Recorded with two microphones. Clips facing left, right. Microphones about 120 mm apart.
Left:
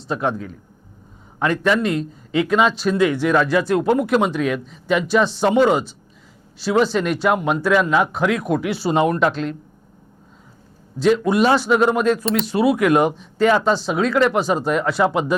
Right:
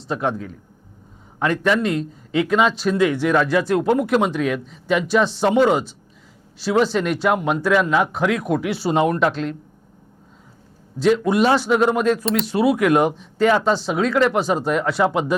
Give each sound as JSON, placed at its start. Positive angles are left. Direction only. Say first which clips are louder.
{"t": 0.1, "sound": "speech", "louder": "left 1 dB", "side_deg": 25}
{"t": 11.0, "sound": "speech", "louder": "left 1 dB", "side_deg": 20}